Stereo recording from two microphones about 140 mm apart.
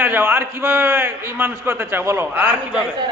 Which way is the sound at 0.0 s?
15° right (ahead or behind).